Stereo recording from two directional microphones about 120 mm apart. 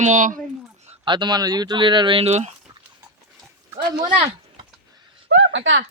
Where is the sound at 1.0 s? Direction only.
40° right (ahead or behind).